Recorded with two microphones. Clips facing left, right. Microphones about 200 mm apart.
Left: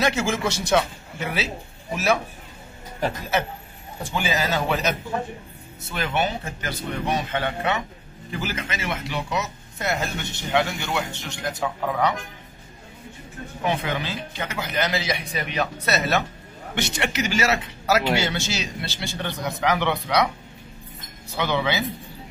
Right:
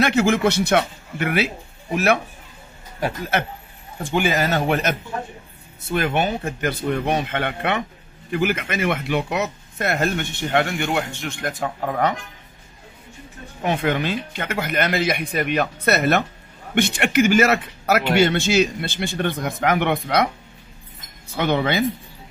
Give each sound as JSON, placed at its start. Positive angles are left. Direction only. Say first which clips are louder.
{"t": 0.0, "sound": "speech", "louder": "right 6 dB", "side_deg": -60}
{"t": 4.0, "sound": "speech", "louder": "right 5 dB", "side_deg": -55}
{"t": 13.7, "sound": "speech", "louder": "right 5 dB", "side_deg": -55}
{"t": 21.4, "sound": "speech", "louder": "right 4 dB", "side_deg": -55}